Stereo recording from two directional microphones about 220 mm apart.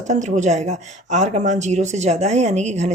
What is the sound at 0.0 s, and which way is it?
A woman's voice, 35° right (ahead or behind).